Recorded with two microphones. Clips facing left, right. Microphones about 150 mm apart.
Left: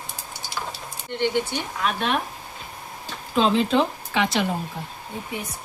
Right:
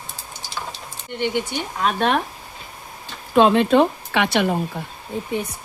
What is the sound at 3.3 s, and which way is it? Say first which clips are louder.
Speech: right 5 dB; 60° right (ahead or behind).